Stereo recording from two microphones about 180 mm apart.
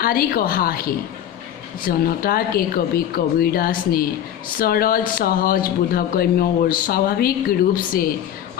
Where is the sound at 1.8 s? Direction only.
55° left (ahead or behind).